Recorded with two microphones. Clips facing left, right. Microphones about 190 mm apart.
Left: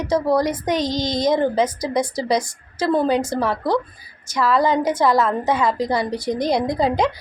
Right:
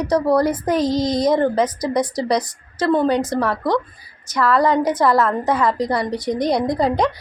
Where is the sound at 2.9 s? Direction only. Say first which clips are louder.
Right 1 dB; 5° left (ahead or behind).